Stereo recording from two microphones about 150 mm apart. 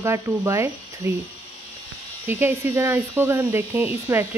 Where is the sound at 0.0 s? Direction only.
20° right (ahead or behind).